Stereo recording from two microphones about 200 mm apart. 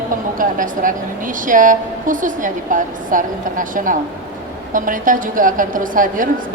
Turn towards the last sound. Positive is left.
turn(degrees=-40)  # may be behind; listen again after turning